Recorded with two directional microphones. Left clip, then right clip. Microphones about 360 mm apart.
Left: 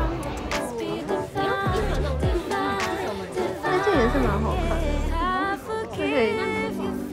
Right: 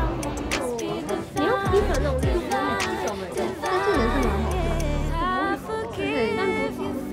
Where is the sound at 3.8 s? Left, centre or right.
Centre.